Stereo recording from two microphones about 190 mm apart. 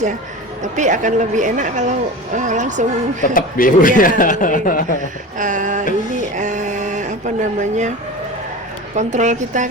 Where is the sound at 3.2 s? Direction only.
45° left (ahead or behind).